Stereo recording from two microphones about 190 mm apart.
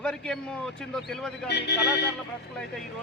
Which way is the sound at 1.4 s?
60° left (ahead or behind).